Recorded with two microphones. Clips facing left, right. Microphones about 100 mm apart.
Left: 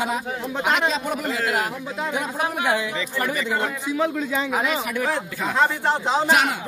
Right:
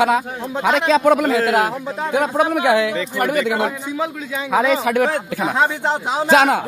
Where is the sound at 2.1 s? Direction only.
70° right (ahead or behind); by 2.9 s 90° right.